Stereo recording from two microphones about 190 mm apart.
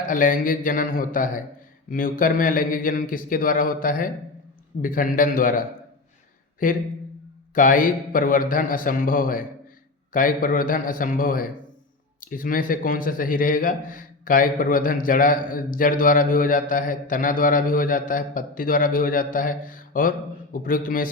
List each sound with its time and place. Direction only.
0.0 s speech: 45° left (ahead or behind)